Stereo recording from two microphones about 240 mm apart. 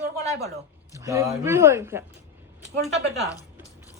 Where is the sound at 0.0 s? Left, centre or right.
Right.